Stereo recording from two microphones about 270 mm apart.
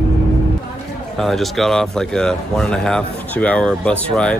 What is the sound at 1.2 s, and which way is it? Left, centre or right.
Speech, centre.